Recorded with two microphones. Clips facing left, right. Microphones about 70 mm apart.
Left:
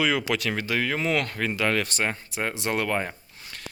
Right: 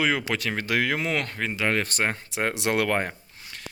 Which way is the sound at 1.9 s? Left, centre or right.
Right.